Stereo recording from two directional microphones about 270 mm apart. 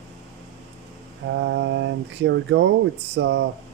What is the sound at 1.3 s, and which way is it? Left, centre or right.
Speech, right.